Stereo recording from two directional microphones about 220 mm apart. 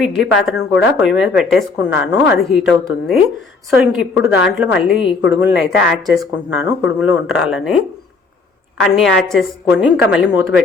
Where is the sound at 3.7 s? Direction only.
5° right (ahead or behind).